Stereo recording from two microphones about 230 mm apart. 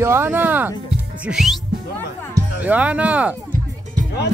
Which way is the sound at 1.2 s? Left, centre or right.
Centre.